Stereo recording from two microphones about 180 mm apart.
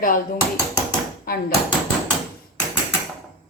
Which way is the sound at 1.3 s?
55° left (ahead or behind).